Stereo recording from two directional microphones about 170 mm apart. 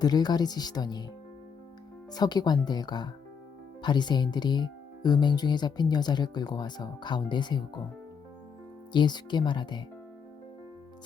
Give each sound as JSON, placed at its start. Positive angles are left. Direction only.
{"t": 0.0, "sound": "speech", "side_deg": 25}
{"t": 2.1, "sound": "speech", "side_deg": 25}
{"t": 8.9, "sound": "speech", "side_deg": 25}